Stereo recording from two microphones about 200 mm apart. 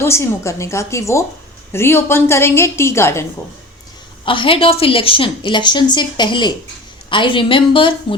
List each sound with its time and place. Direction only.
0.0 s a woman's voice: 15° left (ahead or behind)
4.3 s a woman's voice: 25° left (ahead or behind)